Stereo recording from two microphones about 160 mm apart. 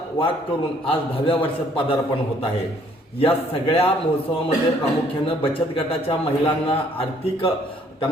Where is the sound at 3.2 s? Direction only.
35° left (ahead or behind).